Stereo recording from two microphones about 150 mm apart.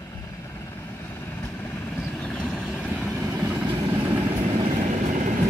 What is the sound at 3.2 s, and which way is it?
Vehicle, 15° right (ahead or behind).